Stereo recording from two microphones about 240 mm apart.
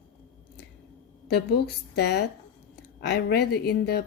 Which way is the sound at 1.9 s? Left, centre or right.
Left.